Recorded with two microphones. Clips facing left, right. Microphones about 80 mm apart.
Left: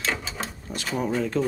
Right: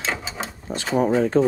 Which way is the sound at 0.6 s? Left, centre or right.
Right.